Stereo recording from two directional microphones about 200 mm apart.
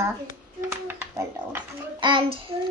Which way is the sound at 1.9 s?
25° right (ahead or behind).